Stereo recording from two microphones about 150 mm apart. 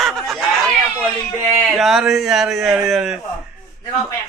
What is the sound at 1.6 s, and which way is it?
A man's voice, centre (ahead or behind).